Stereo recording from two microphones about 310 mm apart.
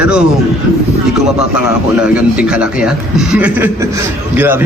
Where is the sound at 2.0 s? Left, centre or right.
Centre.